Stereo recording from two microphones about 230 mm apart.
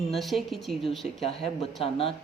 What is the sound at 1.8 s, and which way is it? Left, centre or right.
Speech, left.